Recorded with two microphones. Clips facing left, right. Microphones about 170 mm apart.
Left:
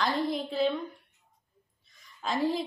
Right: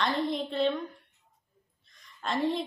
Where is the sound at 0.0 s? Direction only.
Centre (ahead or behind).